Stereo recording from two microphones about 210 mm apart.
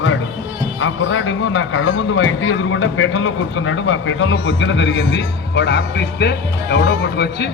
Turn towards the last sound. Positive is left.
turn(degrees=50)  # may be behind; listen again after turning